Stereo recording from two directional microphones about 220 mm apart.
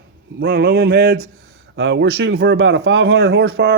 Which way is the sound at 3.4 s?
45° right (ahead or behind).